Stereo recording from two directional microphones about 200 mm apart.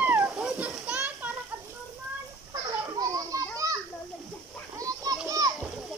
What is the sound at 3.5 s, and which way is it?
Children playing, 15° right (ahead or behind).